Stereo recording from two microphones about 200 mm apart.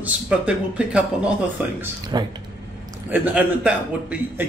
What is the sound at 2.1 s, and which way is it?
Speech, 20° right (ahead or behind).